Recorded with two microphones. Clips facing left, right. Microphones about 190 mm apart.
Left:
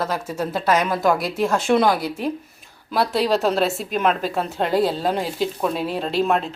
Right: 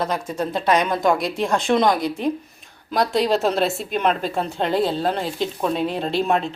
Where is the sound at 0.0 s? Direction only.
5° left (ahead or behind).